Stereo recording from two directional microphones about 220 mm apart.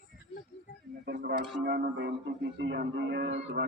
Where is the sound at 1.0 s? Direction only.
45° right (ahead or behind).